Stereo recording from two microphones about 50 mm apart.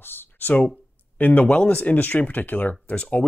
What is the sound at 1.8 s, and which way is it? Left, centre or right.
Speech, left.